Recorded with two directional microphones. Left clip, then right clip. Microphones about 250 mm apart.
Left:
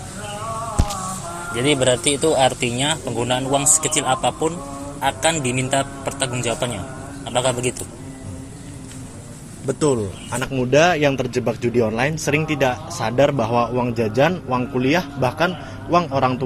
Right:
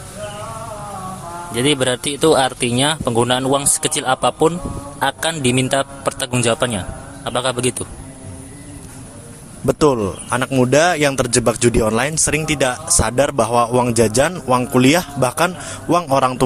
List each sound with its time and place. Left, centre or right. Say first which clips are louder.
1.5 s speech: right 1 dB; right
9.6 s speech: right 5 dB; right